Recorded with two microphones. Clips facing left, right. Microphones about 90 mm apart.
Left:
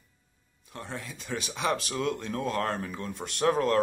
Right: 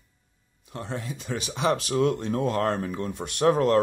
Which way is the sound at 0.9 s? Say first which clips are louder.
Right 4 dB; 45° right (ahead or behind).